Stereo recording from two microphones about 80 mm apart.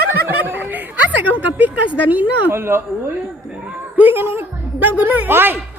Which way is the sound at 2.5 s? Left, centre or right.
Right.